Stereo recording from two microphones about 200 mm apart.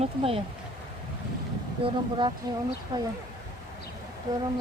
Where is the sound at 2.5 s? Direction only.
20° right (ahead or behind).